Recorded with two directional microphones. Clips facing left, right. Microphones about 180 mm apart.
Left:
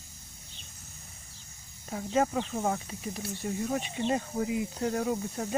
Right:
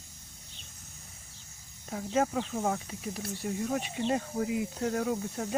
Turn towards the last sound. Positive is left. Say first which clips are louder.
# left 1 dB
turn(degrees=10)  # may be behind; listen again after turning